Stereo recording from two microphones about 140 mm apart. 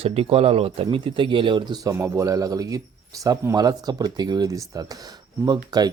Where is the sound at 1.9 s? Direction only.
20° right (ahead or behind).